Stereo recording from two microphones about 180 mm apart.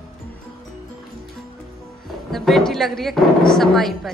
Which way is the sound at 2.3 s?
Centre (ahead or behind).